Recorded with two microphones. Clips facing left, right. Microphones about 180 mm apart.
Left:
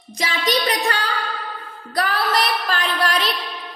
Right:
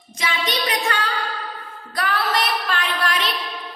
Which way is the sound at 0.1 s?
35° left (ahead or behind).